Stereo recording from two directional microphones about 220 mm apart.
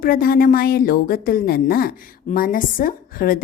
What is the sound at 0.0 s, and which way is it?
A woman's voice, 40° left (ahead or behind).